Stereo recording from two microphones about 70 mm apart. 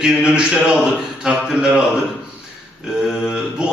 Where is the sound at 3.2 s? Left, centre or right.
Centre.